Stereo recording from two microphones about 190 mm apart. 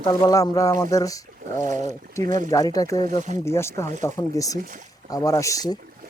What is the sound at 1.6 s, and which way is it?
Speech, 40° right (ahead or behind).